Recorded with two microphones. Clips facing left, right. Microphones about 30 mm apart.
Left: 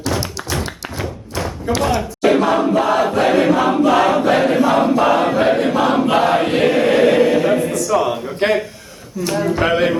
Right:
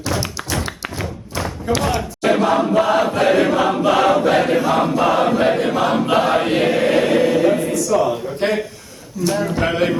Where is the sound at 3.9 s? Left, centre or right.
Centre.